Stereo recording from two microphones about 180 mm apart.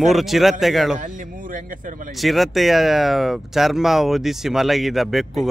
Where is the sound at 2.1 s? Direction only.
Centre (ahead or behind).